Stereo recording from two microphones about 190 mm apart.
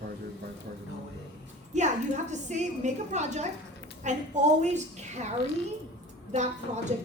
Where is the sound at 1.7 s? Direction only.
40° right (ahead or behind).